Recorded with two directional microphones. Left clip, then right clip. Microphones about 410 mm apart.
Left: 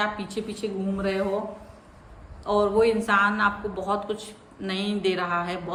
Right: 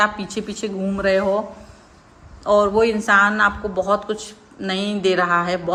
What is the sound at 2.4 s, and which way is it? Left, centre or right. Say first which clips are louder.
A woman's voice: right 6 dB; centre.